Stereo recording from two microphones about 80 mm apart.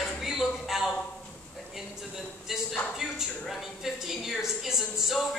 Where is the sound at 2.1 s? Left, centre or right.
Centre.